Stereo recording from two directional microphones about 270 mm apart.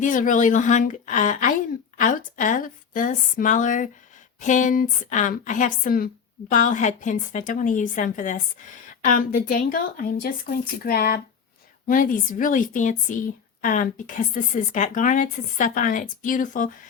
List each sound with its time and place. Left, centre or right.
0.0 s a woman's voice: left